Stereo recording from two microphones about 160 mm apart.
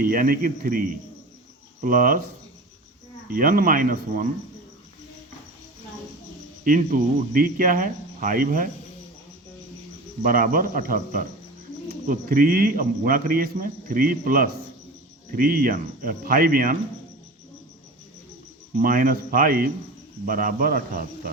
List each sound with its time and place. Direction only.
0.0 s speech: 60° right (ahead or behind)
3.2 s speech: 65° right (ahead or behind)
6.7 s speech: 60° right (ahead or behind)
10.2 s speech: 60° right (ahead or behind)
18.8 s speech: 60° right (ahead or behind)